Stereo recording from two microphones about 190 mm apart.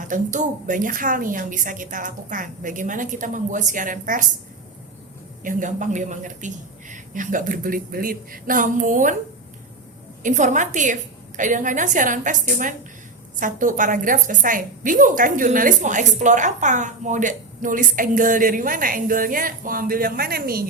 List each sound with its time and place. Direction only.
0.0 s a woman's voice: 40° right (ahead or behind)
5.4 s a woman's voice: 45° right (ahead or behind)
10.2 s a woman's voice: 40° right (ahead or behind)